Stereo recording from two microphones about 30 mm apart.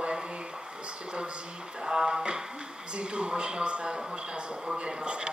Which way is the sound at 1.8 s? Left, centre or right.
Right.